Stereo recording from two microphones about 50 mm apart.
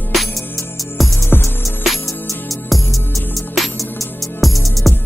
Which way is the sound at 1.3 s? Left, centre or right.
Left.